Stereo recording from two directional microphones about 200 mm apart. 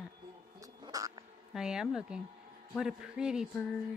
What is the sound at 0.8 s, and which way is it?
Cat, 20° right (ahead or behind).